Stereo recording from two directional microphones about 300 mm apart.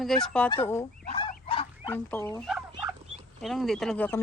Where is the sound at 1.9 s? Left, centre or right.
Centre.